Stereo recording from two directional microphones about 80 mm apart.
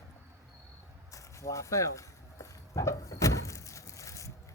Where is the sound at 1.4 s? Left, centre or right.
Left.